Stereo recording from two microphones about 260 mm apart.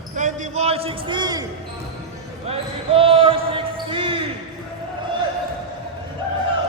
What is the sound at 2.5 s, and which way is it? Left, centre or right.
Basketball bounce, right.